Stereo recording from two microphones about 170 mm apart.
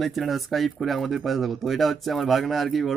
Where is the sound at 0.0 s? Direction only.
Centre (ahead or behind).